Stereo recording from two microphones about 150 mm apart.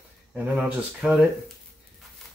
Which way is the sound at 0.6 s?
10° right (ahead or behind).